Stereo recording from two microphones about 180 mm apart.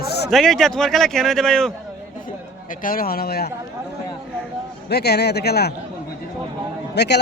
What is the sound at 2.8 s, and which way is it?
Speech, 55° left (ahead or behind).